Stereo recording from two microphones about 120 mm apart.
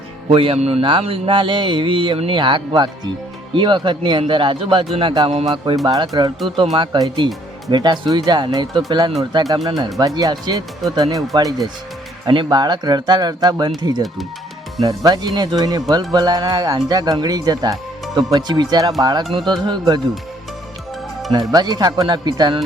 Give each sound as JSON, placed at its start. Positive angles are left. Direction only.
{"t": 0.3, "sound": "speech", "side_deg": -50}
{"t": 21.5, "sound": "speech", "side_deg": -35}